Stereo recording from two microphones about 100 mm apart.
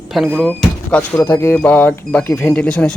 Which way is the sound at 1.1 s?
25° left (ahead or behind).